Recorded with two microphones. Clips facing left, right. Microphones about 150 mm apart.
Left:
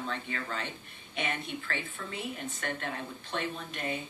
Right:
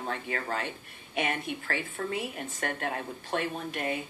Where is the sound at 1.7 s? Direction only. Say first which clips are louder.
Right 6 dB; 45° right (ahead or behind).